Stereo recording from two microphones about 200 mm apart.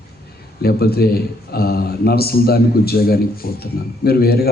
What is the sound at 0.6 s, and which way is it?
A man's voice, 50° left (ahead or behind).